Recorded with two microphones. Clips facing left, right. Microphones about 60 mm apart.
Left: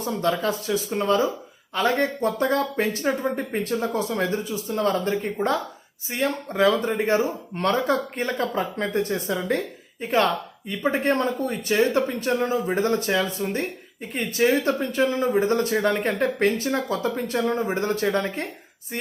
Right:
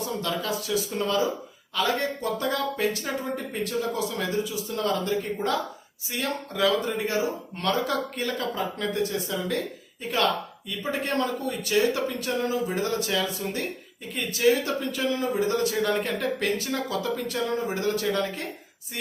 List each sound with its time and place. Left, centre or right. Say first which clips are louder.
0.0 s speech: left 6 dB; left